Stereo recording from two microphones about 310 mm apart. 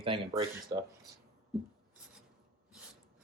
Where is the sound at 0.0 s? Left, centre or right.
Centre.